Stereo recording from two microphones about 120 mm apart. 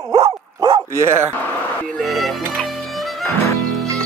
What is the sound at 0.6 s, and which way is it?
Dog, 30° right (ahead or behind).